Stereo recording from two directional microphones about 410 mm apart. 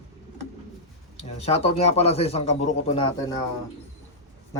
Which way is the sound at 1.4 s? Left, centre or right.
Centre.